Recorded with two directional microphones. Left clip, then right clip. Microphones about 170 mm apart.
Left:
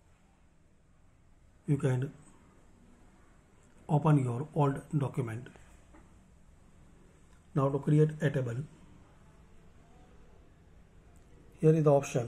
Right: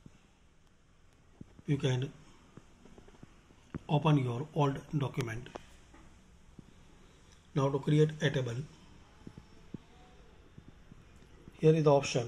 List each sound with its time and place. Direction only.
1.7 s speech: 5° left (ahead or behind)
3.8 s speech: 5° left (ahead or behind)
7.5 s speech: 5° left (ahead or behind)
11.6 s a man's voice: 10° left (ahead or behind)